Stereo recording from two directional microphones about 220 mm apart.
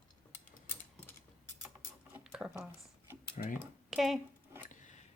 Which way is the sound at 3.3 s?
35° left (ahead or behind).